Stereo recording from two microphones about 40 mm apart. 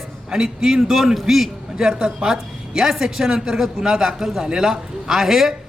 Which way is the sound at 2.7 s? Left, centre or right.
Centre.